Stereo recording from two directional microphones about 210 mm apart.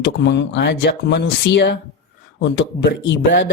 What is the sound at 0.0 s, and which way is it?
Speech, 55° left (ahead or behind).